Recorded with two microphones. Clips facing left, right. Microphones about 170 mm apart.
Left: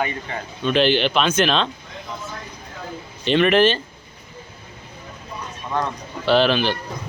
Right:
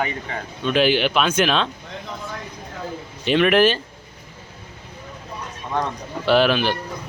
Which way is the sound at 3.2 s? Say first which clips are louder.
Even; 5° right (ahead or behind).